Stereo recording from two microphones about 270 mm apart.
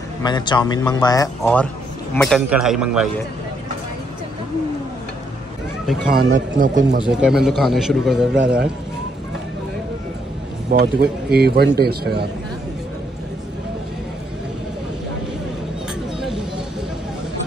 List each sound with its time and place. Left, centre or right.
0.2 s a man's voice: centre
5.9 s speech: right
7.1 s a man's voice: centre
10.7 s speech: right